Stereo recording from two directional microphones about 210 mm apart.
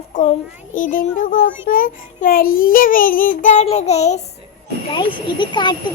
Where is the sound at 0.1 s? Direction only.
35° left (ahead or behind).